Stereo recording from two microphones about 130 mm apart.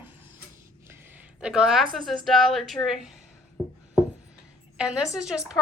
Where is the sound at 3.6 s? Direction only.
35° right (ahead or behind).